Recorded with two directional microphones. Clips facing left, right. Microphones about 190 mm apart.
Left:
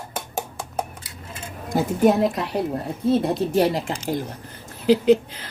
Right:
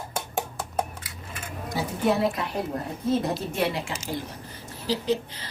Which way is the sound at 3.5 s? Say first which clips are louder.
Left 7 dB; 40° left (ahead or behind).